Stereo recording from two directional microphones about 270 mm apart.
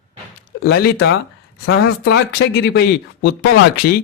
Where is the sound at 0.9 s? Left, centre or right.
Left.